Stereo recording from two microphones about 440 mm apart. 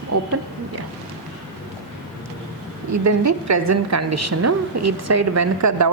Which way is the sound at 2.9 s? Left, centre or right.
Right.